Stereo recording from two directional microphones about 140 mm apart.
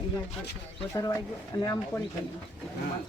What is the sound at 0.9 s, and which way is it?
A man's voice, 25° left (ahead or behind).